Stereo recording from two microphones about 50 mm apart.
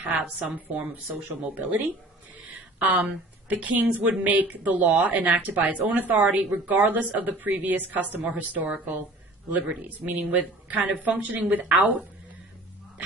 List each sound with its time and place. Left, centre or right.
0.4 s a woman's voice: right
2.4 s a sound: right
3.0 s a woman's voice: right